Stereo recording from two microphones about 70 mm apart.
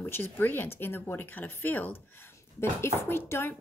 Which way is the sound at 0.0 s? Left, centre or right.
Left.